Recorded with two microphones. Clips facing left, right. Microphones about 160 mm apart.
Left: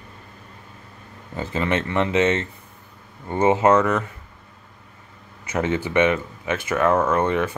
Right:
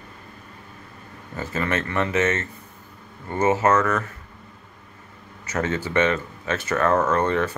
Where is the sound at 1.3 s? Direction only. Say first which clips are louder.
Left 2 dB; 15° left (ahead or behind).